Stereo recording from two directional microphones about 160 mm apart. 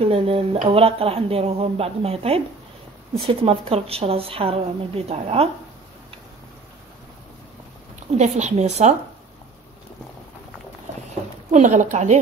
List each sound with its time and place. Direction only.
0.0 s a woman's voice: 35° right (ahead or behind)
8.2 s a woman's voice: 45° right (ahead or behind)
11.5 s a woman's voice: 50° right (ahead or behind)